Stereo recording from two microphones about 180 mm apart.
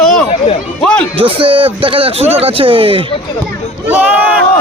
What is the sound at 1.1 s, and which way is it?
A man's voice, 30° right (ahead or behind).